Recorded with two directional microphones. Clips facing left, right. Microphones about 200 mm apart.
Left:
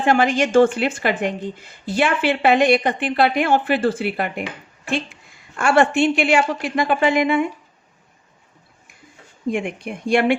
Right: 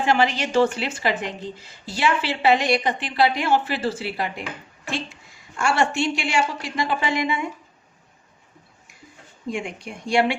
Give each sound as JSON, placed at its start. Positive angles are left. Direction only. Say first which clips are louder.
{"t": 0.0, "sound": "a woman's voice", "louder": "left 4 dB", "side_deg": 50}
{"t": 5.5, "sound": "a woman's voice", "louder": "left 6 dB", "side_deg": 55}
{"t": 9.5, "sound": "a woman's voice", "louder": "left 6 dB", "side_deg": 55}